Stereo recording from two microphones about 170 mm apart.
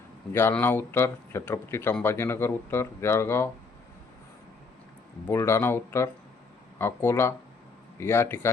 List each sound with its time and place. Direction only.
0.3 s speech: 15° left (ahead or behind)
5.3 s speech: 15° left (ahead or behind)